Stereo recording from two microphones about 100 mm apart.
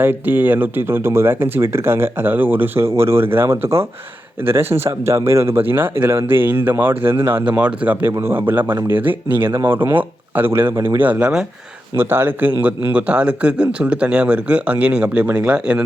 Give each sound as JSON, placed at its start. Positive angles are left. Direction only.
{"t": 0.0, "sound": "speech", "side_deg": -20}
{"t": 11.9, "sound": "speech", "side_deg": -20}